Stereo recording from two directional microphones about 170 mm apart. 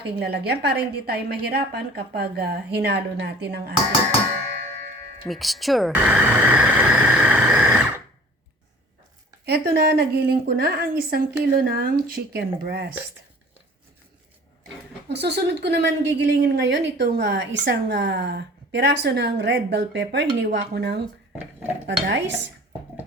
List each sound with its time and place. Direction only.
0.2 s a woman's voice: 70° right (ahead or behind)
5.3 s a sound: centre (ahead or behind)
9.5 s a woman's voice: 70° right (ahead or behind)
15.1 s a woman's voice: 85° right
22.0 s a woman's voice: 90° right